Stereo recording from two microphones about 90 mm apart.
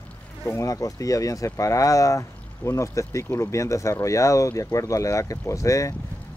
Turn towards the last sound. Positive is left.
turn(degrees=35)  # may be behind; listen again after turning